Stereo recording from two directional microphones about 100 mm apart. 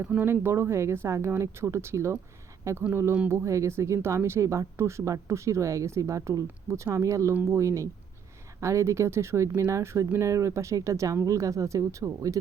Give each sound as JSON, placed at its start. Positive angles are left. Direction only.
{"t": 0.0, "sound": "speech", "side_deg": -15}